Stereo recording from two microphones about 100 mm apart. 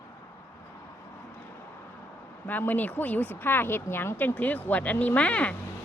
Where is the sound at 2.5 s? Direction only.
15° left (ahead or behind).